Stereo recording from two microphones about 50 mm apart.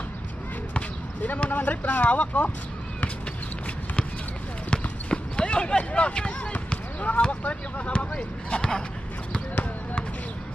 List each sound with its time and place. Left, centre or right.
0.7 s speech: left
4.6 s clip-clop: left
6.7 s speech: left